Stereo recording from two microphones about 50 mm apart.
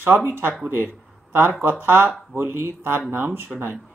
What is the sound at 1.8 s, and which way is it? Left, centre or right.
Speech, right.